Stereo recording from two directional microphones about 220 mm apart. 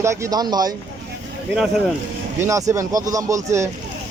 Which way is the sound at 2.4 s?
15° right (ahead or behind).